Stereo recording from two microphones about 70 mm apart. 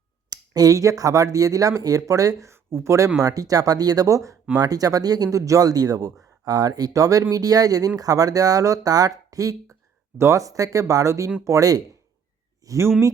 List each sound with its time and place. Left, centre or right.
0.3 s speech: right
2.5 s speech: right
3.2 s speech: right
4.5 s speech: right